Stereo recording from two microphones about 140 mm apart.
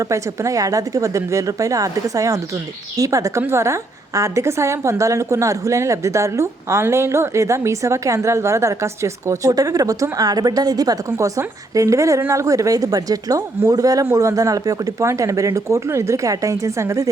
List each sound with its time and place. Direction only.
0.0 s a woman's voice: 20° right (ahead or behind)